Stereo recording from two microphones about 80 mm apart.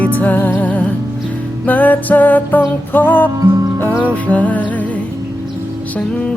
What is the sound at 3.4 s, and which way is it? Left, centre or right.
Music, right.